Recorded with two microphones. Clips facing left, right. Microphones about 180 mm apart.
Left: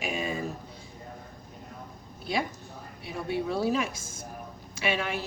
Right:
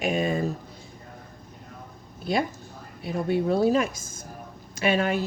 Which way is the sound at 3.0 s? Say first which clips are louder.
Right 6 dB; 50° right (ahead or behind).